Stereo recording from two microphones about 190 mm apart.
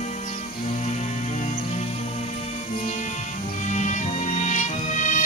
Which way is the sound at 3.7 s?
40° left (ahead or behind).